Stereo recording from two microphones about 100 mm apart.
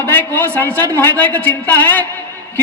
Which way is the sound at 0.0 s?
20° left (ahead or behind).